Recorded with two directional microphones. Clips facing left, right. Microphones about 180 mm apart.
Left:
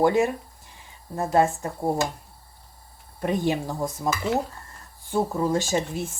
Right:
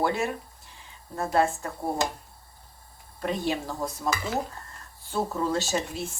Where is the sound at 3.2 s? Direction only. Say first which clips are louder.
Left 4 dB; 15° left (ahead or behind).